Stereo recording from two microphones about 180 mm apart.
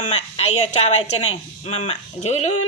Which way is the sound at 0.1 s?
35° left (ahead or behind).